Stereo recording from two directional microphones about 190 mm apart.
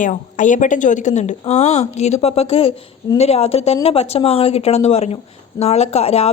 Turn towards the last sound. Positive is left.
turn(degrees=35)  # may be behind; listen again after turning